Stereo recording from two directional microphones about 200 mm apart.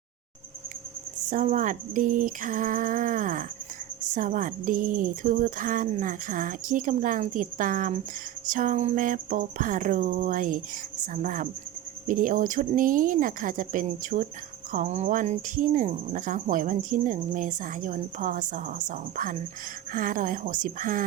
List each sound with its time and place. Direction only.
1.3 s speech: 40° right (ahead or behind)